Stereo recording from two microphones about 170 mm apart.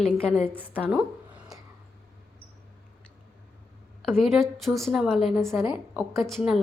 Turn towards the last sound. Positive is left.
turn(degrees=0)  # may be behind; listen again after turning